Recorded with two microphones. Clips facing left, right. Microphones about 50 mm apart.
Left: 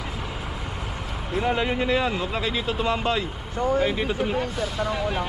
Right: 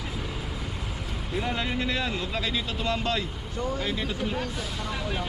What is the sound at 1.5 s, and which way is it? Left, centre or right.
Speech, centre.